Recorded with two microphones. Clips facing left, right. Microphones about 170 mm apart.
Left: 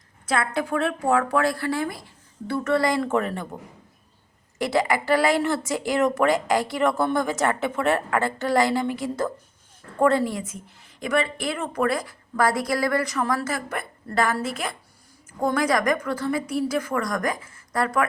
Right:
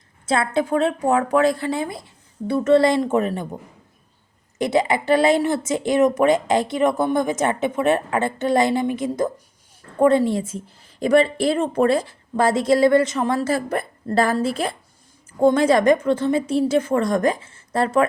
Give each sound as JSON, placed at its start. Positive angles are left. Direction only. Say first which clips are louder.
{"t": 0.3, "sound": "a woman's voice", "louder": "right 4 dB", "side_deg": -25}
{"t": 4.5, "sound": "a woman's voice", "louder": "right 3 dB", "side_deg": -20}